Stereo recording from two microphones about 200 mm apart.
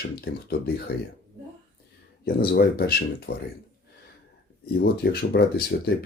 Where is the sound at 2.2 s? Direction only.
50° left (ahead or behind).